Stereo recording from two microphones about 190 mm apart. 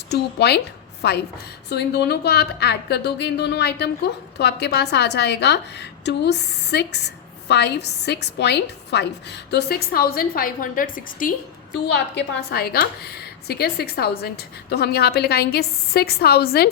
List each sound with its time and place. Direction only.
0.1 s a woman's voice: 60° left (ahead or behind)
11.7 s a woman's voice: 65° left (ahead or behind)